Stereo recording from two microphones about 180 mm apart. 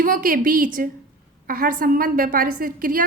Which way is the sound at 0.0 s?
50° right (ahead or behind).